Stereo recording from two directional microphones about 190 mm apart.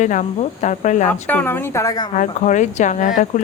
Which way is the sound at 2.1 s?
40° left (ahead or behind).